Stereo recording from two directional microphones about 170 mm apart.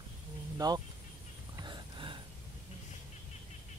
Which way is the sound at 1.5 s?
25° right (ahead or behind).